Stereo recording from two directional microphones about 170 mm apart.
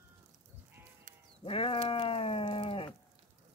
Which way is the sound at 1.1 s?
50° right (ahead or behind).